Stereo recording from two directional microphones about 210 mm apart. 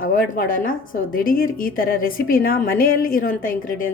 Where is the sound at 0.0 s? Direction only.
40° left (ahead or behind).